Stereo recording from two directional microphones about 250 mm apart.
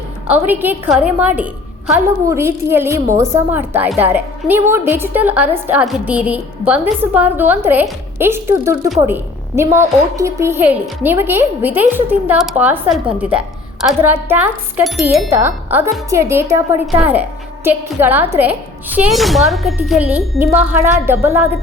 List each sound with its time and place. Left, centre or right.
0.3 s a woman's voice: centre